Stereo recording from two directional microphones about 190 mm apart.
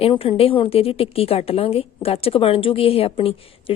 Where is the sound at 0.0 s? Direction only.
30° left (ahead or behind).